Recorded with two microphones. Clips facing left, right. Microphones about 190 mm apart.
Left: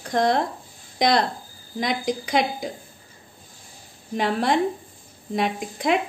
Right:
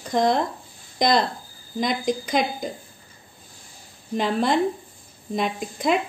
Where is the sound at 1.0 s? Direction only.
65° left (ahead or behind).